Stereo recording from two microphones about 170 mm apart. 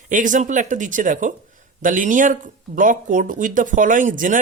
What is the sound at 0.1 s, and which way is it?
Speech, 50° right (ahead or behind).